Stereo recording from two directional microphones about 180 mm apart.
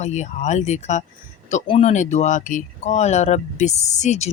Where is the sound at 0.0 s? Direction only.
40° left (ahead or behind).